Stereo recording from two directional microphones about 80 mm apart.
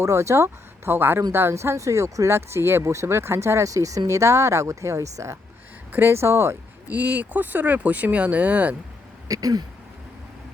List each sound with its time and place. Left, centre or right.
0.0 s speech: right
5.9 s speech: right
6.9 s speech: centre
9.3 s a sound: right